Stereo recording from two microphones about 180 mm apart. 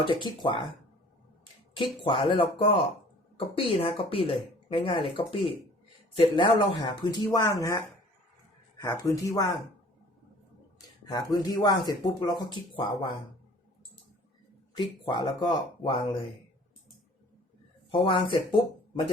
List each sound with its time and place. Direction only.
0.1 s speech: 25° left (ahead or behind)
1.7 s speech: 25° left (ahead or behind)
11.0 s speech: 20° left (ahead or behind)
14.8 s speech: 25° left (ahead or behind)
18.0 s speech: 30° left (ahead or behind)